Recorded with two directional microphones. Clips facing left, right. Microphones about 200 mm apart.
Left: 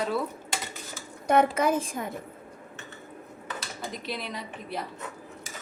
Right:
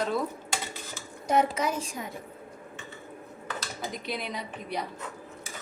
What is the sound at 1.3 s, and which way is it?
Speech, 55° left (ahead or behind).